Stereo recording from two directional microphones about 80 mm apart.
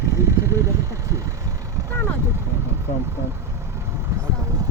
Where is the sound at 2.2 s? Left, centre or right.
Right.